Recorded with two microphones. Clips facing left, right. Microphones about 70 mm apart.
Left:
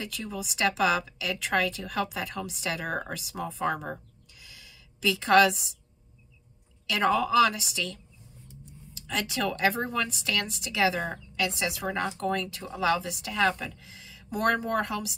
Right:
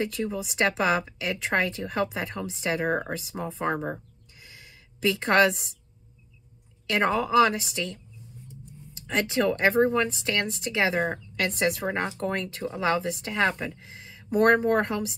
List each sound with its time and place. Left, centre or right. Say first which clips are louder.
0.0 s a woman's voice: right 7 dB; right
4.4 s a sound: right 3 dB; right
6.9 s a woman's voice: right 1 dB; right